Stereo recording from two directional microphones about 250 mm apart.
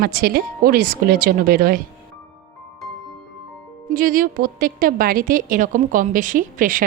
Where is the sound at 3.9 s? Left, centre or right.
Right.